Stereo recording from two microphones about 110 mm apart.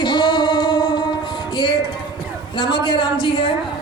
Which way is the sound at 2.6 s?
45° left (ahead or behind).